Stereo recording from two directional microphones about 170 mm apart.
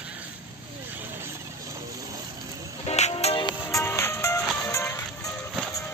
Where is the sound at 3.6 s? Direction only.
15° left (ahead or behind).